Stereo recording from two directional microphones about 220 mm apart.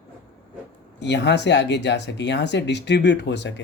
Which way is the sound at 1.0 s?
50° left (ahead or behind).